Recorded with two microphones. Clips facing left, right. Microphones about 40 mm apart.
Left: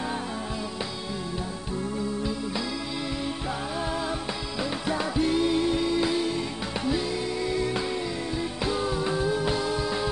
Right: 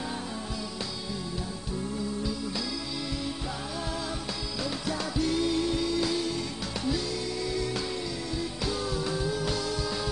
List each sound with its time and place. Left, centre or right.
4.8 s music: left